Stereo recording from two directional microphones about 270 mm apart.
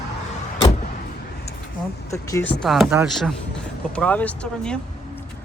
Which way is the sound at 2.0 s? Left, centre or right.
Centre.